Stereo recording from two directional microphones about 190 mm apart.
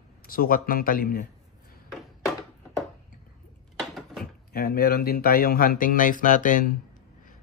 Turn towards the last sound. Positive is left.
turn(degrees=45)  # may be behind; listen again after turning